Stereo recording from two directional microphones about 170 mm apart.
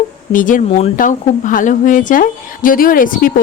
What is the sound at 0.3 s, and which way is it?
A woman's voice, 50° left (ahead or behind).